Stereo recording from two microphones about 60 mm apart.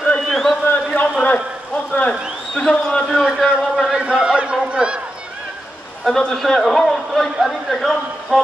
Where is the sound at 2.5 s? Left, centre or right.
Centre.